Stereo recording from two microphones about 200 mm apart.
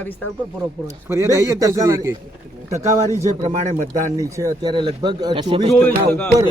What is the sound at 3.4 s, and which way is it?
Speech, 40° right (ahead or behind).